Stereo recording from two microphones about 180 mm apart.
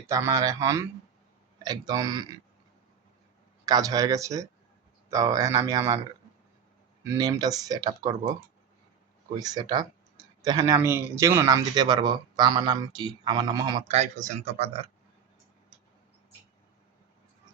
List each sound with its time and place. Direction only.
0.1 s a man's voice: 15° right (ahead or behind)
3.7 s speech: 20° right (ahead or behind)
7.0 s speech: 20° right (ahead or behind)
9.4 s speech: 20° right (ahead or behind)
13.8 s speech: 35° right (ahead or behind)